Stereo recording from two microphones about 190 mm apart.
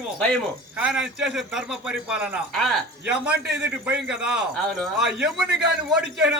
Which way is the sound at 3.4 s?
60° right (ahead or behind).